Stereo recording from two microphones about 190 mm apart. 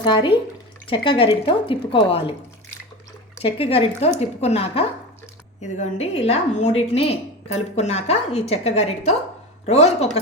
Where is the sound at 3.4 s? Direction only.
30° left (ahead or behind).